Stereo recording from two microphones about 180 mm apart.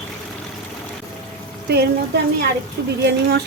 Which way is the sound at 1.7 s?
65° right (ahead or behind).